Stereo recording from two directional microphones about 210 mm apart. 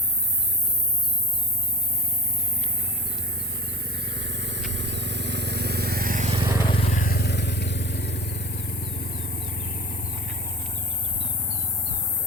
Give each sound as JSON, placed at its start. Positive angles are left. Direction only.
{"t": 3.3, "sound": "vehicle", "side_deg": -50}
{"t": 6.7, "sound": "vehicle", "side_deg": 30}